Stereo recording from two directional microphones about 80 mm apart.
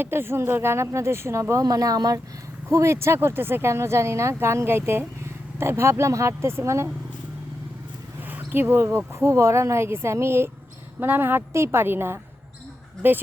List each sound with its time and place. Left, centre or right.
0.0 s speech: right
2.6 s speech: right
8.3 s a woman's voice: right